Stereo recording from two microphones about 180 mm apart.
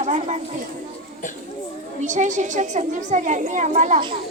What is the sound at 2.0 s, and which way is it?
Speech, 40° right (ahead or behind).